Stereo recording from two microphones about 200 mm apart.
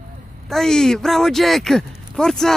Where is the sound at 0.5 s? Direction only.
5° left (ahead or behind).